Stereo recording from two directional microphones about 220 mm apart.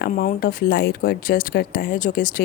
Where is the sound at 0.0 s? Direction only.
40° left (ahead or behind).